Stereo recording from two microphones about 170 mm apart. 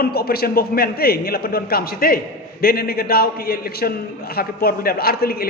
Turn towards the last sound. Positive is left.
turn(degrees=65)  # may be behind; listen again after turning